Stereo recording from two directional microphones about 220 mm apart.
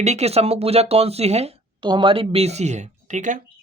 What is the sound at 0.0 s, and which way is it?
Speech, 30° right (ahead or behind).